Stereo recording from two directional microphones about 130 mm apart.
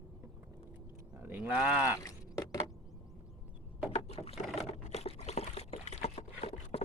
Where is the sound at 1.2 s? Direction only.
15° right (ahead or behind).